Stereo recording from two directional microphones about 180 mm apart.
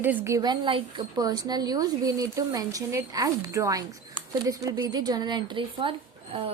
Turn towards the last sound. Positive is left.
turn(degrees=-30)  # may be behind; listen again after turning